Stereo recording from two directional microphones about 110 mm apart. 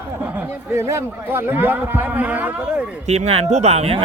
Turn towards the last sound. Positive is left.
turn(degrees=-70)  # may be behind; listen again after turning